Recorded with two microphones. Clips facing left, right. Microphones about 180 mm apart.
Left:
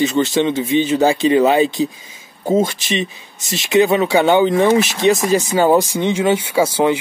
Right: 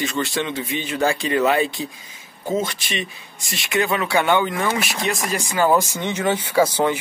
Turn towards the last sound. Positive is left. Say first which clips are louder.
# left 3 dB
turn(degrees=10)  # may be behind; listen again after turning